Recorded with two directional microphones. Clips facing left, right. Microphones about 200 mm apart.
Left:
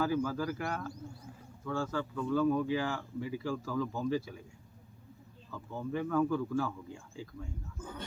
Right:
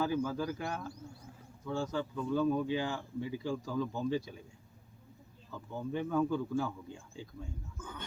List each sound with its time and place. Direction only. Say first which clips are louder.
0.0 s speech: left 1 dB; 20° right (ahead or behind)
5.5 s speech: left 1 dB; 20° right (ahead or behind)
7.8 s a sound: left 3 dB; 35° left (ahead or behind)